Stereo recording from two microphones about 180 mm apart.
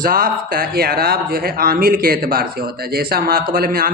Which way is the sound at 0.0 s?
55° right (ahead or behind).